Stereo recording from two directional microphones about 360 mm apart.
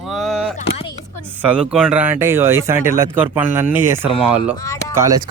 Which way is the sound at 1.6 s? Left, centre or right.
Centre.